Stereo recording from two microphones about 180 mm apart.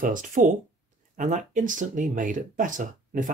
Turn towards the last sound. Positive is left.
turn(degrees=-45)  # may be behind; listen again after turning